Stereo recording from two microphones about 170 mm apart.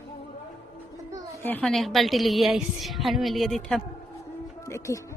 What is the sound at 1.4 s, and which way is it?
A woman's voice, 10° left (ahead or behind).